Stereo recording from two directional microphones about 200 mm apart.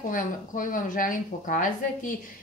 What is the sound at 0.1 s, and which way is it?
A woman's voice, 40° left (ahead or behind).